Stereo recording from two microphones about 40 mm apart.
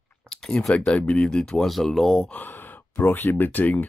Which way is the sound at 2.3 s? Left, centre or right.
Left.